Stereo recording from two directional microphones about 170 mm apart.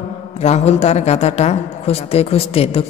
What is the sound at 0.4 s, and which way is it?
A woman's voice, 40° left (ahead or behind).